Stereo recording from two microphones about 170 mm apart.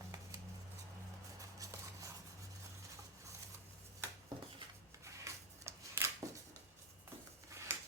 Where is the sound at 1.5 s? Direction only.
20° right (ahead or behind).